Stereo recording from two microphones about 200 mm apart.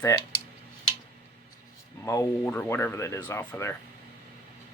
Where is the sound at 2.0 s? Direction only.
10° left (ahead or behind).